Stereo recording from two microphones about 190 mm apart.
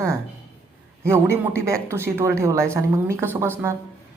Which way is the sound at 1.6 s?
15° right (ahead or behind).